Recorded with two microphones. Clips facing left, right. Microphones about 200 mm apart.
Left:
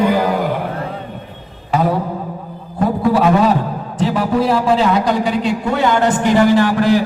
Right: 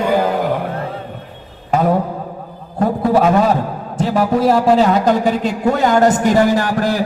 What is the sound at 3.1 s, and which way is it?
A man's voice, 45° right (ahead or behind).